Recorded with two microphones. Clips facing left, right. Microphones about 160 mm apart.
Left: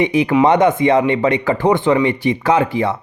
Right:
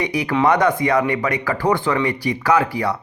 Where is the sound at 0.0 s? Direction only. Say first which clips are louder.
Left 5 dB; 20° left (ahead or behind).